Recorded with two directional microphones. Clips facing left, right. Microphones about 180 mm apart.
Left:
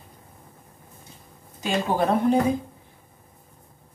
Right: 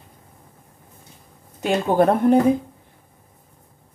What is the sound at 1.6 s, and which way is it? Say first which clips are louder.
Speech: right 6 dB; 55° right (ahead or behind).